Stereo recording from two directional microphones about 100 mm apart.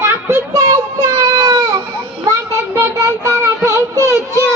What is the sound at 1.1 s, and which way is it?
Baby cry, 40° right (ahead or behind).